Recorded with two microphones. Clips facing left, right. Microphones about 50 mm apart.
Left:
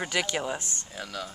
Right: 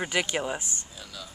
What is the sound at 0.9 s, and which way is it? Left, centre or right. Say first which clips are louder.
Speech: left 7 dB; left.